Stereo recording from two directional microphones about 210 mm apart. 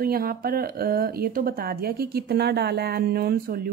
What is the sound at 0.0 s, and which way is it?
Speech, 45° right (ahead or behind).